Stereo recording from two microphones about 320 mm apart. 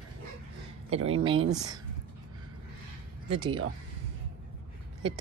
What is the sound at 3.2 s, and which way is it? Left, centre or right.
Speech, centre.